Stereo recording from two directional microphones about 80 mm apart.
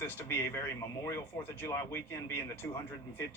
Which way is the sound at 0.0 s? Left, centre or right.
Left.